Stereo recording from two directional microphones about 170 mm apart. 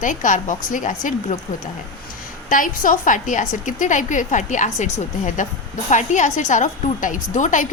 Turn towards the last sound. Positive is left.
turn(degrees=50)  # may be behind; listen again after turning